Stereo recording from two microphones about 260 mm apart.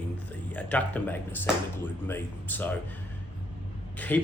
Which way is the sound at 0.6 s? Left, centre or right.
Centre.